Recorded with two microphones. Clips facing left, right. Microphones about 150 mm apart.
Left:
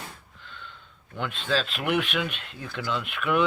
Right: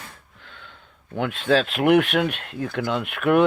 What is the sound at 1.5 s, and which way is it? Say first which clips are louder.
Speech: right 9 dB; 60° right (ahead or behind).